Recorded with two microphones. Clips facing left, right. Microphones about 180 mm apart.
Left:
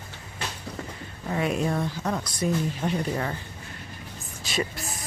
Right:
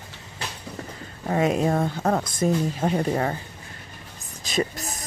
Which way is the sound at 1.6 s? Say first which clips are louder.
Right 5 dB; 50° right (ahead or behind).